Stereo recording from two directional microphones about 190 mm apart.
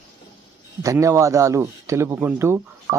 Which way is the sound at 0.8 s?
15° right (ahead or behind).